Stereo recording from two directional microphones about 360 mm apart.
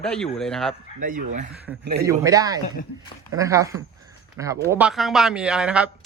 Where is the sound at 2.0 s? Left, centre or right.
Centre.